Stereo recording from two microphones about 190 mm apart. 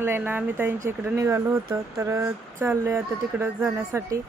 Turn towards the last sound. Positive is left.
turn(degrees=-15)  # may be behind; listen again after turning